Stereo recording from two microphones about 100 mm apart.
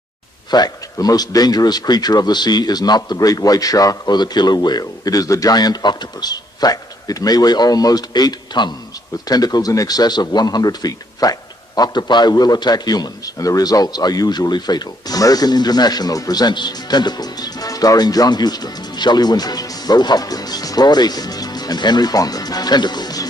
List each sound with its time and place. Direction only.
0.5 s a man's voice: 40° left (ahead or behind)